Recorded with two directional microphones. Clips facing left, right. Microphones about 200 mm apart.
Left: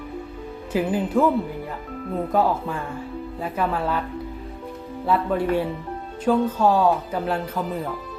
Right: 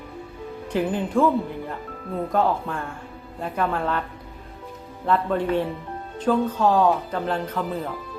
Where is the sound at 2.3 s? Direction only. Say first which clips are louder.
Left 1 dB; 5° left (ahead or behind).